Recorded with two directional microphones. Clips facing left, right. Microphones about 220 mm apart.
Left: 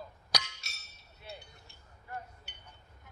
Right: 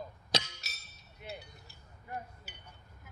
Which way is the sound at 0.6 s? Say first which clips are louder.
Right 1 dB; centre (ahead or behind).